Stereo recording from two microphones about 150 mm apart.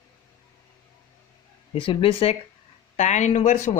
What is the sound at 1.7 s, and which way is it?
Speech, 35° left (ahead or behind).